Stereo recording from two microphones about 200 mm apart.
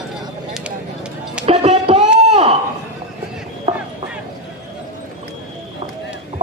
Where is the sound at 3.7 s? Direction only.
35° right (ahead or behind).